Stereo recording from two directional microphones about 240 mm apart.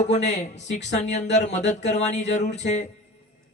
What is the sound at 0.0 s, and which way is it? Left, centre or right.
Speech, left.